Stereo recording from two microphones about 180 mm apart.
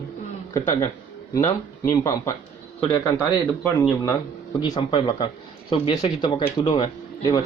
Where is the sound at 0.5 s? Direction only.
15° left (ahead or behind).